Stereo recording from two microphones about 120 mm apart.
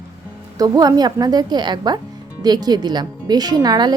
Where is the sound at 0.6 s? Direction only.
30° right (ahead or behind).